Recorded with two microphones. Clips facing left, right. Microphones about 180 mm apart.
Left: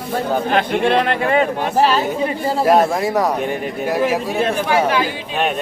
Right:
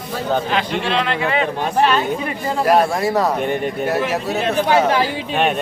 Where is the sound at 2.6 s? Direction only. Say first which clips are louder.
Left 1 dB; 25° left (ahead or behind).